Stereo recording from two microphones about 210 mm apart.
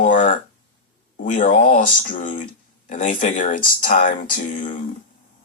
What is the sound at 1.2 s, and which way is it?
Speech, 40° left (ahead or behind).